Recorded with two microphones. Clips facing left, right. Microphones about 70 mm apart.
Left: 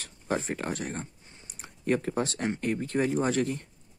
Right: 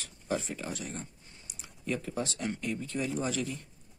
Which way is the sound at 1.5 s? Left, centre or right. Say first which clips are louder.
Left 7 dB; left.